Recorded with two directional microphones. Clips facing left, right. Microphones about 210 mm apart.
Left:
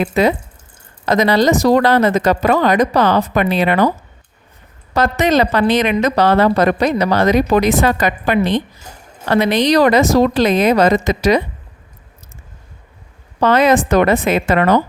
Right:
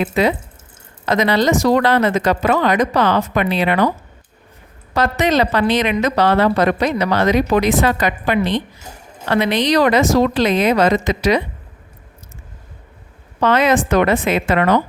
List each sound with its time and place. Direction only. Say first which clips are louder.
0.0 s speech: left 2 dB; 45° left (ahead or behind)
4.9 s speech: left 2 dB; 45° left (ahead or behind)
13.4 s speech: left 2 dB; 40° left (ahead or behind)